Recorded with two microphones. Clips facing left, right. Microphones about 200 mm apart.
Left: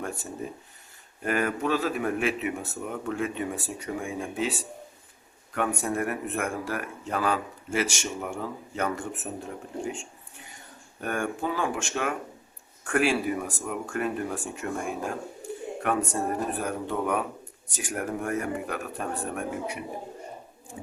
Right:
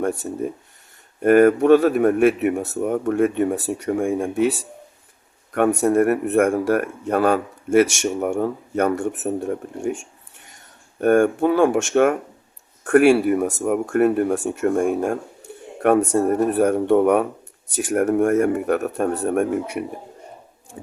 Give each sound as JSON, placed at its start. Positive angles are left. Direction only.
{"t": 0.2, "sound": "speech", "side_deg": -50}
{"t": 2.7, "sound": "speech", "side_deg": -45}
{"t": 5.5, "sound": "speech", "side_deg": -45}
{"t": 5.9, "sound": "speech", "side_deg": -60}
{"t": 11.0, "sound": "speech", "side_deg": -50}
{"t": 16.0, "sound": "speech", "side_deg": -70}